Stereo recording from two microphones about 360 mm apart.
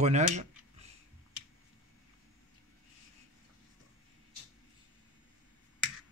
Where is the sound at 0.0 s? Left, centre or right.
Centre.